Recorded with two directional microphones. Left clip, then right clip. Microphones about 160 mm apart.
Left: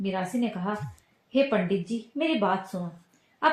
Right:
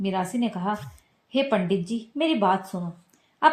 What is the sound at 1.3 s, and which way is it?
Speech, 40° right (ahead or behind).